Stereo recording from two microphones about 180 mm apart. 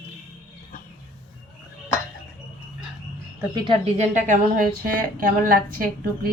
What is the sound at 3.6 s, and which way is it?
A woman's voice, 30° right (ahead or behind).